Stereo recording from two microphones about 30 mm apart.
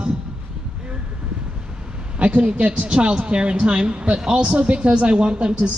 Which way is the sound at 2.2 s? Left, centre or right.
Right.